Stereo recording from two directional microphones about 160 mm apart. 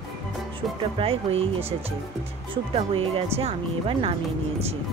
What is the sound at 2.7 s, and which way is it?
Speech, 40° right (ahead or behind).